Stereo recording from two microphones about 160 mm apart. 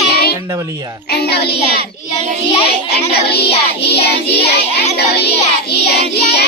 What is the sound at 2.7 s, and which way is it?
Child singing, 80° left.